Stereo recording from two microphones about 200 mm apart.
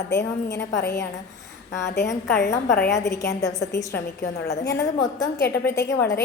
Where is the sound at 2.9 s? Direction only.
15° left (ahead or behind).